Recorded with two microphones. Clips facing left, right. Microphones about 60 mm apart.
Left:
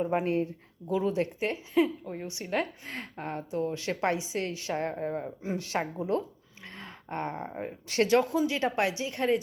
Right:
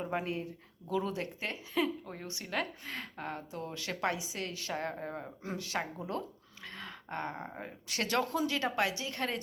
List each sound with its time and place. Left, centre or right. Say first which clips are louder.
0.0 s a woman's voice: left 8 dB; left
5.2 s speech: left 6 dB; centre
5.5 s a woman's voice: left 5 dB; left
6.7 s a sound: left 2 dB; left
7.6 s a woman's voice: left 12 dB; left
8.0 s a woman's voice: left 7 dB; centre